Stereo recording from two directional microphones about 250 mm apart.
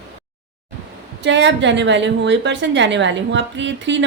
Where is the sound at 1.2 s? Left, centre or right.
Right.